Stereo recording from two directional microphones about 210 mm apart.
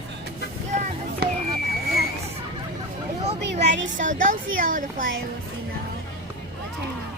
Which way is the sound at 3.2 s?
35° right (ahead or behind).